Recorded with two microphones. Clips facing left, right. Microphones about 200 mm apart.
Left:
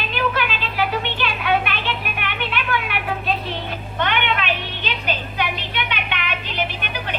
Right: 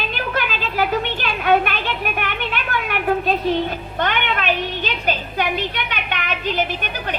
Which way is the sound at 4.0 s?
45° right (ahead or behind).